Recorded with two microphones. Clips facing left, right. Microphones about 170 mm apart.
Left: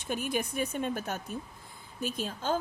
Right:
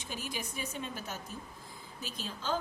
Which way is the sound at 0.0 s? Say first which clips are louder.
Left 8 dB; 55° left (ahead or behind).